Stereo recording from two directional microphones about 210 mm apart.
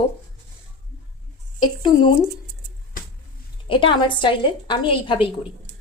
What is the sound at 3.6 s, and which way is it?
A woman's voice, 25° left (ahead or behind).